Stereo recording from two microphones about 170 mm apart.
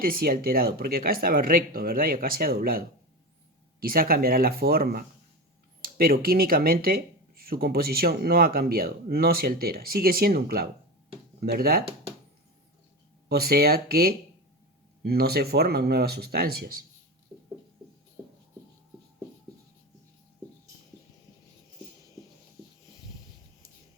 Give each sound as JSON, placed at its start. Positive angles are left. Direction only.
{"t": 0.0, "sound": "speech", "side_deg": -60}
{"t": 13.2, "sound": "speech", "side_deg": -65}